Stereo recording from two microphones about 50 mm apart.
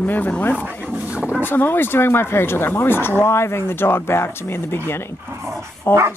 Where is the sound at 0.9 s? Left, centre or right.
Right.